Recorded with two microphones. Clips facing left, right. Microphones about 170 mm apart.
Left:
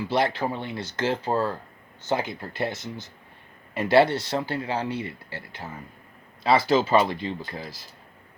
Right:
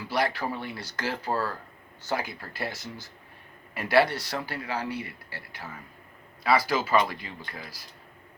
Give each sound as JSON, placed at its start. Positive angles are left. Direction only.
{"t": 0.1, "sound": "speech", "side_deg": 25}